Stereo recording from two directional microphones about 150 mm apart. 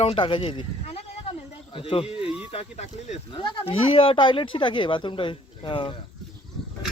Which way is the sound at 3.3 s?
35° left (ahead or behind).